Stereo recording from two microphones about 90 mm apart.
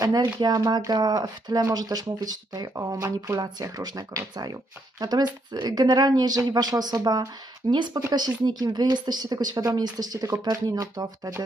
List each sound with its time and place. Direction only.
0.0 s speech: 45° right (ahead or behind)
7.7 s speech: 60° right (ahead or behind); by 11.4 s 40° right (ahead or behind)